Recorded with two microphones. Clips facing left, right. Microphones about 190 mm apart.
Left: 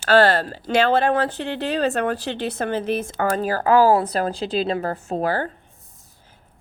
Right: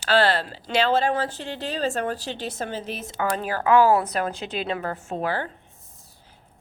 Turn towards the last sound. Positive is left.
turn(degrees=40)  # may be behind; listen again after turning